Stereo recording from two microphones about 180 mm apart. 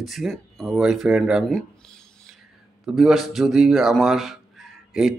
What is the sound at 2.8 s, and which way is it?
Speech, centre (ahead or behind).